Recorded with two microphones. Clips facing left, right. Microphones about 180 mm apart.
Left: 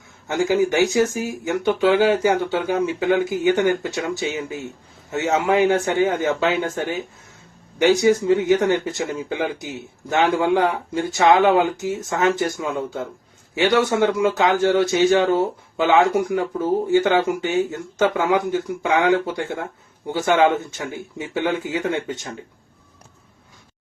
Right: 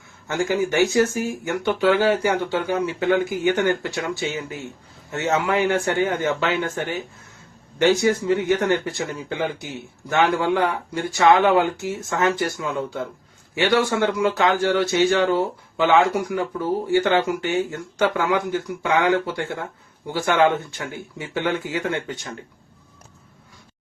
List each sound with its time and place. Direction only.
0.3 s speech: 15° left (ahead or behind)